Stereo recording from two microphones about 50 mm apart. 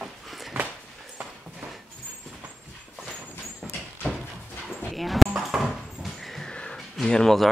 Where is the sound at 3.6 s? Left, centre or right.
Centre.